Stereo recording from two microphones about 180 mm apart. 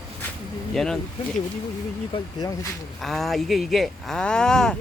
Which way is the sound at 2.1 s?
20° left (ahead or behind).